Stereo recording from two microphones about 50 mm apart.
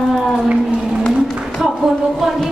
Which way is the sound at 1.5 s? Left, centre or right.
Centre.